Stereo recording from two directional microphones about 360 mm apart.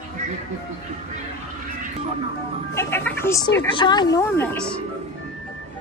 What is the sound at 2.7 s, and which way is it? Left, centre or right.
Speech, centre.